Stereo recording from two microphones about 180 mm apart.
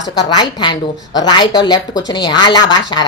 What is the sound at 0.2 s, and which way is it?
A woman's voice, 20° left (ahead or behind).